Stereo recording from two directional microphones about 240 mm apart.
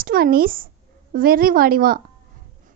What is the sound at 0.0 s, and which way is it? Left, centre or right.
A woman's voice, right.